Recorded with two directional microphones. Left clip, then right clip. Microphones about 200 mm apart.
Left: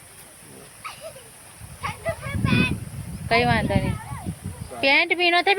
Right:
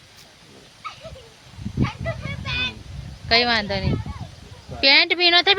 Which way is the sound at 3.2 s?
15° right (ahead or behind).